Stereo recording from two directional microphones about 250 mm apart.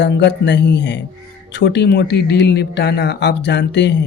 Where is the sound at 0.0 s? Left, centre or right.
Left.